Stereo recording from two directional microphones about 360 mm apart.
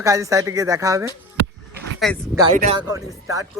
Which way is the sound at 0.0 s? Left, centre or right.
Centre.